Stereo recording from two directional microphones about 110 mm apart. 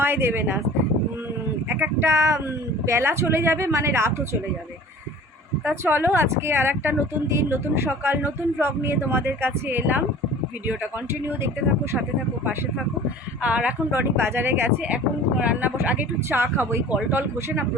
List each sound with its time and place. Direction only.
0.0 s speech: 20° right (ahead or behind)
1.7 s speech: 20° right (ahead or behind)
5.6 s speech: 20° right (ahead or behind)
11.3 s speech: 25° right (ahead or behind)
13.4 s speech: 10° right (ahead or behind)
14.2 s speech: 20° right (ahead or behind)